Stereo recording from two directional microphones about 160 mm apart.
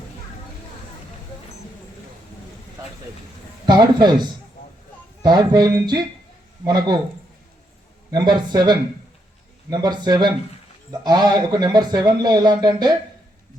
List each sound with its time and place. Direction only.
3.7 s speech: 25° right (ahead or behind)
4.6 s a sound: 65° left (ahead or behind)
5.2 s speech: 25° right (ahead or behind)
8.1 s speech: 25° right (ahead or behind)